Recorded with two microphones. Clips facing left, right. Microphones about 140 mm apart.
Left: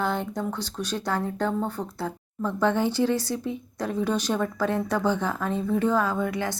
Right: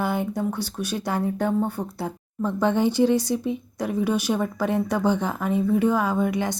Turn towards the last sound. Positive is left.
turn(degrees=-15)  # may be behind; listen again after turning